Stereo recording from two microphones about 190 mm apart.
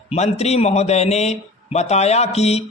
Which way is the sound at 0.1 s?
35° left (ahead or behind).